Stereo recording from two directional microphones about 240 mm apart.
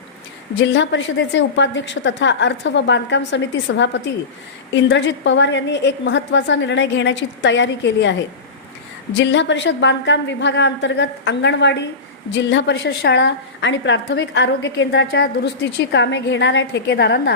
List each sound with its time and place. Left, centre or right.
0.5 s a woman's voice: left
9.1 s a woman's voice: left